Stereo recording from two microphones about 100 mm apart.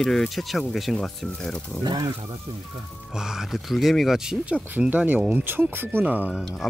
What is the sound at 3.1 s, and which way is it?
Speech, 5° right (ahead or behind).